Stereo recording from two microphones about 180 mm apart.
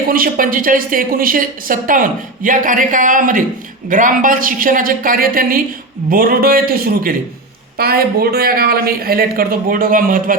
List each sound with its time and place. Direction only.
0.1 s a woman's voice: 50° right (ahead or behind)